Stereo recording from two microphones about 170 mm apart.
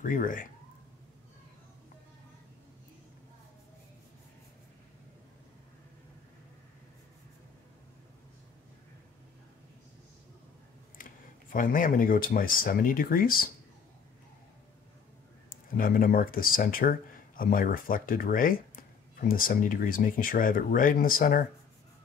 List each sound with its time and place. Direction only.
0.0 s speech: 50° left (ahead or behind)
11.0 s speech: 55° left (ahead or behind)
15.5 s speech: 55° left (ahead or behind)